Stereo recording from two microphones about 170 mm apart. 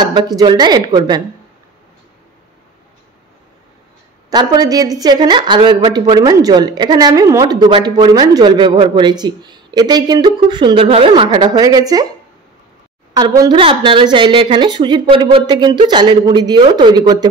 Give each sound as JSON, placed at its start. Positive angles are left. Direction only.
{"t": 0.1, "sound": "speech", "side_deg": -25}
{"t": 4.3, "sound": "speech", "side_deg": -25}
{"t": 13.1, "sound": "speech", "side_deg": -25}